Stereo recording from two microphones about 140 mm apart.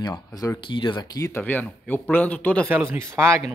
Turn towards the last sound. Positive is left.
turn(degrees=-20)  # may be behind; listen again after turning